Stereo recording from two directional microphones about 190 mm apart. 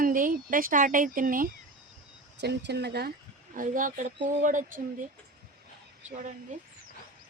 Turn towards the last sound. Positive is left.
turn(degrees=-40)  # may be behind; listen again after turning